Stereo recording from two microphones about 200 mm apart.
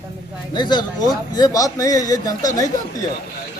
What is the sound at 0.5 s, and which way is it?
Speech, 20° left (ahead or behind).